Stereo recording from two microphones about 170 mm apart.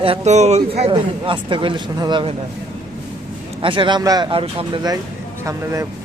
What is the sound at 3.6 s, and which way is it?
Speech, 30° right (ahead or behind).